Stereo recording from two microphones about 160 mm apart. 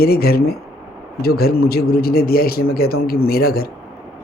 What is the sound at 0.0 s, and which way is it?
A man's voice, 75° left (ahead or behind).